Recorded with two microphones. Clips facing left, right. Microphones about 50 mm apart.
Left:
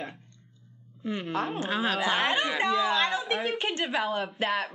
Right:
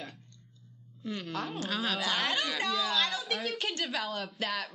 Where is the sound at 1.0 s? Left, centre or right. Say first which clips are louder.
Left 6 dB; left.